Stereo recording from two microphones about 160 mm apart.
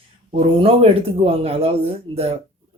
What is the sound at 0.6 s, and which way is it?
Speech, 35° right (ahead or behind).